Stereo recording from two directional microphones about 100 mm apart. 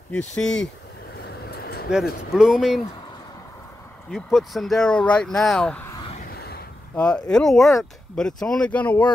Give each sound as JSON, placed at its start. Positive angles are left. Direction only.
{"t": 0.1, "sound": "speech", "side_deg": 10}
{"t": 1.9, "sound": "speech", "side_deg": -5}
{"t": 4.1, "sound": "speech", "side_deg": -5}
{"t": 7.0, "sound": "speech", "side_deg": 10}